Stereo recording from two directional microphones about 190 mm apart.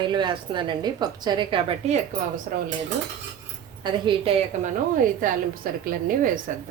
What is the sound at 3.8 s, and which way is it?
Speech, 25° right (ahead or behind).